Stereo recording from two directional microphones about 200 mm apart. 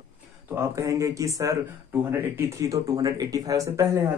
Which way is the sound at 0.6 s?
15° right (ahead or behind).